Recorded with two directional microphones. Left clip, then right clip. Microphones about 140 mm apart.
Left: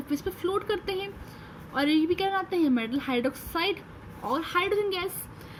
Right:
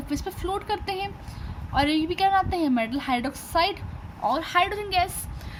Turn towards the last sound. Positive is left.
turn(degrees=-30)  # may be behind; listen again after turning